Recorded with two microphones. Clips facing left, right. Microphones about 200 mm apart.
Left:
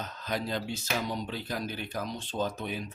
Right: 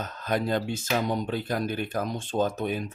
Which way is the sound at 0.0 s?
50° right (ahead or behind).